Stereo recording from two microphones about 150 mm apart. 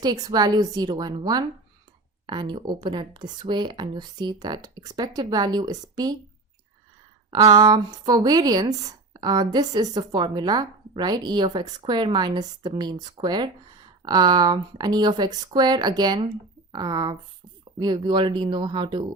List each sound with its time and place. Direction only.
0.0 s speech: 25° right (ahead or behind)
7.3 s speech: 25° right (ahead or behind)